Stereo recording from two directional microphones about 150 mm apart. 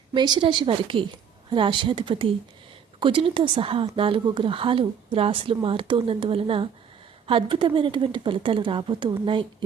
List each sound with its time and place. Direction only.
0.1 s a woman's voice: 30° right (ahead or behind)